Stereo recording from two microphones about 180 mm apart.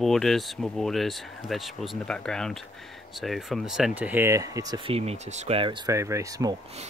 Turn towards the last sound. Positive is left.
turn(degrees=-20)  # may be behind; listen again after turning